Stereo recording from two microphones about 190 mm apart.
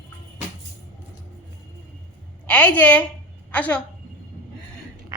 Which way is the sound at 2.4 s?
5° left (ahead or behind).